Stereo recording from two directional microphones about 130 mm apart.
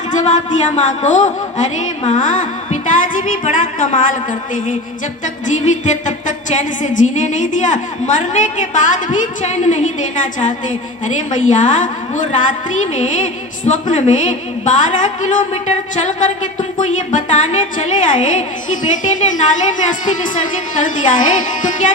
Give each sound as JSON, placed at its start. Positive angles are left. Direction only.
{"t": 0.1, "sound": "music", "side_deg": 70}
{"t": 5.2, "sound": "music", "side_deg": 70}
{"t": 19.9, "sound": "a woman's voice", "side_deg": 80}
{"t": 20.8, "sound": "music", "side_deg": 80}